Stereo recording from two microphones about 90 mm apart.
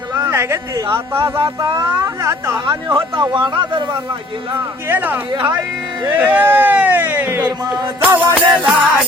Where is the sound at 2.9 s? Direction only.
70° right (ahead or behind).